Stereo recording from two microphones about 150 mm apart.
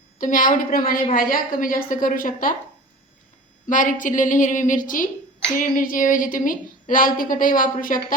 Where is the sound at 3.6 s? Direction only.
60° left (ahead or behind).